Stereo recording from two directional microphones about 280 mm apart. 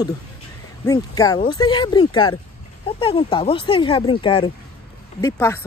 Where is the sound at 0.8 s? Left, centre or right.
Centre.